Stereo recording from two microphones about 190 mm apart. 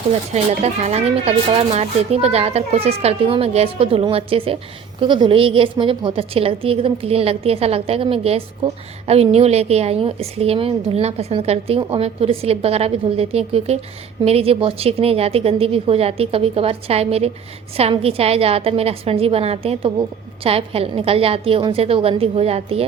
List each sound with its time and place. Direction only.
0.3 s a woman's voice: 35° right (ahead or behind)